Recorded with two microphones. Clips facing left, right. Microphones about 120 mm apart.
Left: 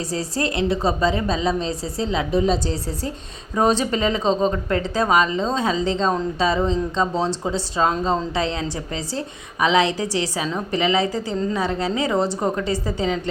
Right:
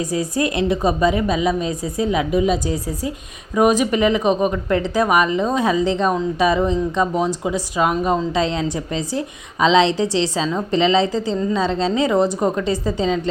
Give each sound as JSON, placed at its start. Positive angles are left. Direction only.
{"t": 0.0, "sound": "a woman's voice", "side_deg": -15}
{"t": 6.7, "sound": "speech", "side_deg": 20}
{"t": 7.8, "sound": "a woman's voice", "side_deg": -15}